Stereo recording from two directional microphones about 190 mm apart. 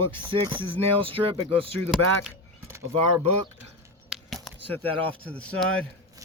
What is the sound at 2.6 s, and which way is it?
Speech, 15° right (ahead or behind).